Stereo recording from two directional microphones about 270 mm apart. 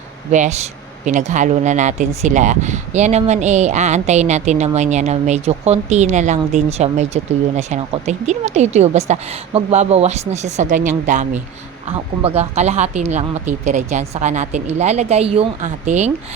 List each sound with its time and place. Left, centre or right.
0.3 s speech: right